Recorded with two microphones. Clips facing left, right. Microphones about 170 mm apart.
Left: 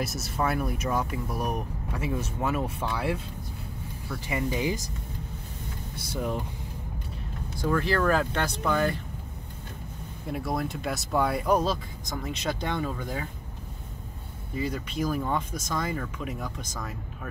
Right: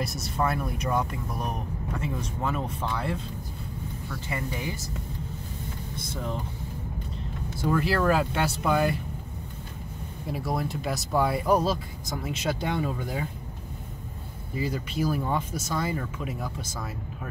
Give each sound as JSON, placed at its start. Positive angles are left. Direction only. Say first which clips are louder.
{"t": 0.0, "sound": "speech", "louder": "right 1 dB", "side_deg": 0}
{"t": 4.3, "sound": "speech", "louder": "left 5 dB", "side_deg": 20}
{"t": 5.9, "sound": "speech", "louder": "left 3 dB", "side_deg": 10}
{"t": 7.6, "sound": "speech", "louder": "right 1 dB", "side_deg": -5}
{"t": 10.2, "sound": "speech", "louder": "even", "side_deg": 0}
{"t": 14.6, "sound": "speech", "louder": "right 1 dB", "side_deg": -5}